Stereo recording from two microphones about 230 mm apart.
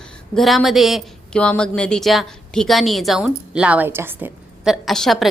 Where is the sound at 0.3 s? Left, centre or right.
Centre.